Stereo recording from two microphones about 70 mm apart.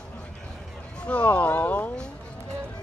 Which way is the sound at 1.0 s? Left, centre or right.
Left.